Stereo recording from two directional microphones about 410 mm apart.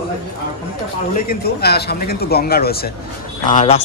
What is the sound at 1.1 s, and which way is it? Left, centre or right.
Speech, left.